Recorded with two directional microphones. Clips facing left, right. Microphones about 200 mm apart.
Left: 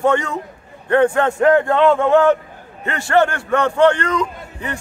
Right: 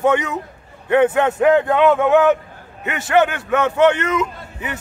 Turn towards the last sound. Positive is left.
turn(degrees=-5)  # may be behind; listen again after turning